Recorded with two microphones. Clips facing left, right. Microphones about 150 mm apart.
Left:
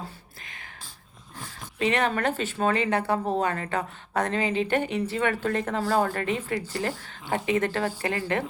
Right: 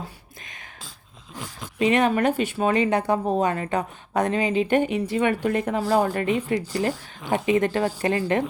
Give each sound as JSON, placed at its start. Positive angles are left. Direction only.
{"t": 1.8, "sound": "speech", "side_deg": -15}